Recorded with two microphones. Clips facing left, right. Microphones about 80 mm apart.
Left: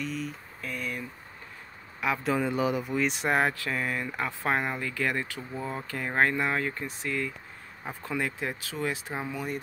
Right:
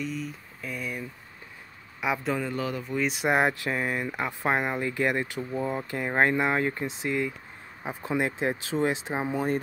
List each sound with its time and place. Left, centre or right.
0.0 s a man's voice: centre
2.3 s speech: centre
2.9 s speech: centre
3.3 s speech: centre